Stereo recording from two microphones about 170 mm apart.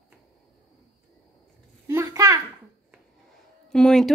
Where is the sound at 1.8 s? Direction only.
15° right (ahead or behind).